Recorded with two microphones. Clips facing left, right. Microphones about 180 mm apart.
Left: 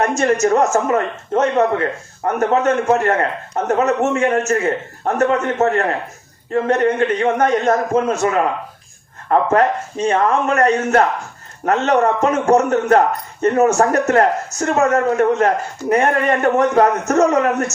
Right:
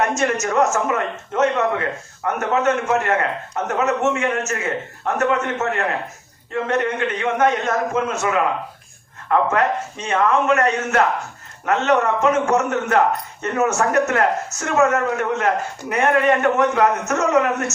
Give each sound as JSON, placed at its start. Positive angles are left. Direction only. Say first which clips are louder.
{"t": 0.1, "sound": "a man's voice", "louder": "left 5 dB", "side_deg": 35}